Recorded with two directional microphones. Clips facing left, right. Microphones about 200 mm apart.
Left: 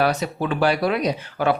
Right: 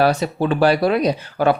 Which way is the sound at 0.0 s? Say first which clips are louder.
Right 4 dB; 30° right (ahead or behind).